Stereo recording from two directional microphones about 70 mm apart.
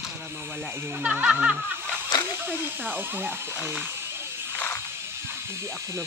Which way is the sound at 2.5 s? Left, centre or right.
Right.